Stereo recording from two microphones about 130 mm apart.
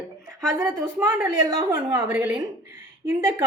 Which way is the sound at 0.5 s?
15° right (ahead or behind).